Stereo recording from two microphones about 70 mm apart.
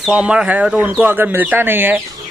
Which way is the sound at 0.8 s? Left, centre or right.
Right.